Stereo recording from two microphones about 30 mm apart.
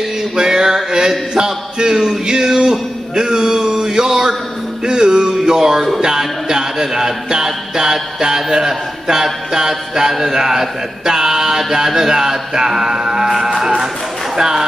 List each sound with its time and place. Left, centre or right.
0.4 s a sound: right
4.8 s music: right
14.3 s speech: centre